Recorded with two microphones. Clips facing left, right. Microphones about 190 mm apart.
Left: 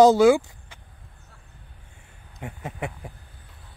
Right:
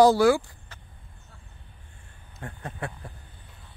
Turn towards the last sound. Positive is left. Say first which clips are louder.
# left 3 dB
turn(degrees=20)  # may be behind; listen again after turning